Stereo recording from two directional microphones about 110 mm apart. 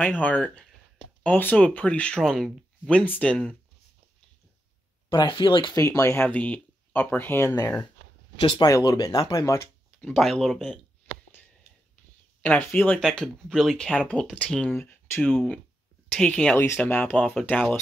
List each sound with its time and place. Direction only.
0.0 s speech: 10° left (ahead or behind)
5.1 s speech: 50° left (ahead or behind)
5.8 s speech: 30° left (ahead or behind)
6.2 s speech: 10° left (ahead or behind)
8.4 s speech: 50° left (ahead or behind)
8.6 s speech: 35° left (ahead or behind)
9.9 s speech: 5° left (ahead or behind)
12.4 s speech: 15° left (ahead or behind)
13.0 s speech: 5° left (ahead or behind)
15.2 s speech: 5° left (ahead or behind)
16.5 s speech: 20° left (ahead or behind)